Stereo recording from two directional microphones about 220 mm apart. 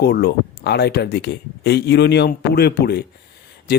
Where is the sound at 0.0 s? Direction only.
45° left (ahead or behind).